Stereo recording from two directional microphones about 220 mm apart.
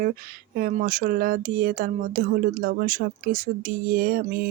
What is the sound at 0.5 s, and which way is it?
Speech, 40° right (ahead or behind).